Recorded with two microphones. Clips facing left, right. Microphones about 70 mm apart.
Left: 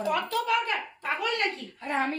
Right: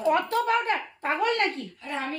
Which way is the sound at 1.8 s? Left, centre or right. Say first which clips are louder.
Left 4 dB; left.